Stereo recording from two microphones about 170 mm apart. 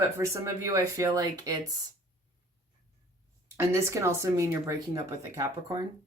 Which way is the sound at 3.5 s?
15° right (ahead or behind).